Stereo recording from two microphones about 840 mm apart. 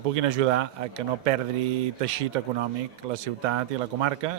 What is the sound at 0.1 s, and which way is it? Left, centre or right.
Speech, right.